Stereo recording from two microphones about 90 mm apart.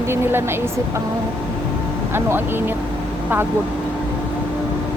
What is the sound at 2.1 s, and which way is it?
Speech, 25° right (ahead or behind).